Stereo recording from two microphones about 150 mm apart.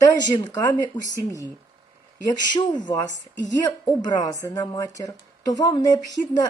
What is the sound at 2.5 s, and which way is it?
A woman's voice, 30° left (ahead or behind).